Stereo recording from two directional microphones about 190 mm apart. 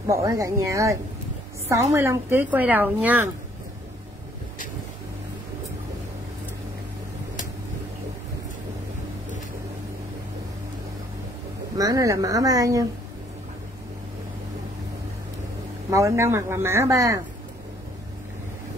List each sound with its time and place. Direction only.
0.0 s a woman's voice: 15° right (ahead or behind)
11.7 s a woman's voice: 20° right (ahead or behind)
15.9 s a woman's voice: 15° right (ahead or behind)